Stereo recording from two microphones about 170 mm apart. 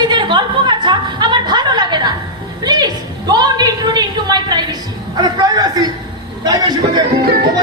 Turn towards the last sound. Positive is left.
turn(degrees=-65)  # may be behind; listen again after turning